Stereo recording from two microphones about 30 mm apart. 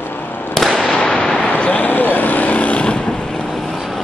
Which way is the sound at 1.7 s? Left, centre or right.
Left.